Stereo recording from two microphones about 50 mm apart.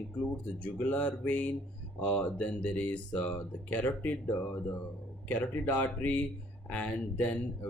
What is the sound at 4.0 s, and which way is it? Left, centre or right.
Speech, left.